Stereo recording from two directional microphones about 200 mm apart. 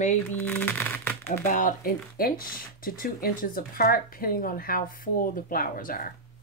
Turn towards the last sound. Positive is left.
turn(degrees=45)  # may be behind; listen again after turning